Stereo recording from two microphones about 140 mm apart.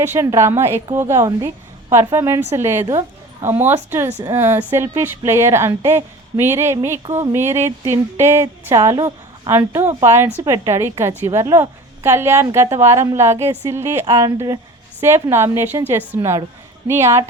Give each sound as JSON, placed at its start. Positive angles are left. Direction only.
{"t": 0.1, "sound": "a woman's voice", "side_deg": -20}
{"t": 9.5, "sound": "a woman's voice", "side_deg": -20}
{"t": 14.0, "sound": "speech", "side_deg": -30}
{"t": 15.0, "sound": "a woman's voice", "side_deg": -15}